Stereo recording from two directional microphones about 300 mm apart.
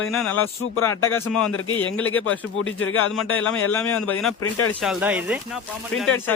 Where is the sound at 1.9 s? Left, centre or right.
Left.